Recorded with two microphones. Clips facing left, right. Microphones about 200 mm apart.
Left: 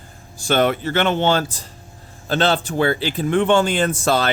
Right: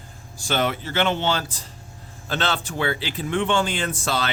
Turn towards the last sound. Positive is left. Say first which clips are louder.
# left 7 dB
turn(degrees=50)  # may be behind; listen again after turning